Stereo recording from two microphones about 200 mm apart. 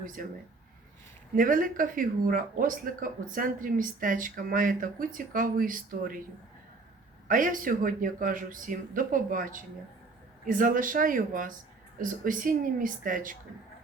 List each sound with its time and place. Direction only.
0.2 s speech: 45° right (ahead or behind)
1.4 s speech: 45° right (ahead or behind)
7.3 s speech: 40° right (ahead or behind)